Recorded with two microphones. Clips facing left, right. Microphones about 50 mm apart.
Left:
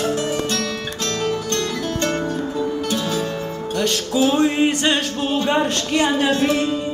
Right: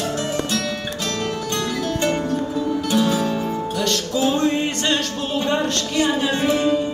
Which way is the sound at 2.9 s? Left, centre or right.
Centre.